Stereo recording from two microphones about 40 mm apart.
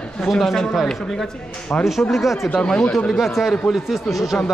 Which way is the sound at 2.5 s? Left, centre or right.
Centre.